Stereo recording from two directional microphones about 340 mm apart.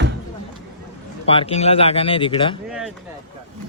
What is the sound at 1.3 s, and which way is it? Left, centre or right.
Speech, centre.